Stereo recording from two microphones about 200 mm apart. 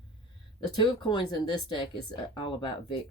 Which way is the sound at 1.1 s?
20° left (ahead or behind).